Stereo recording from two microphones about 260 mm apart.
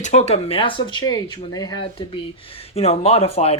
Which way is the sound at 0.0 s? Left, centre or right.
Left.